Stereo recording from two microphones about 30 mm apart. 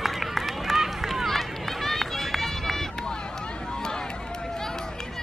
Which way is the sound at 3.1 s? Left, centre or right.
Left.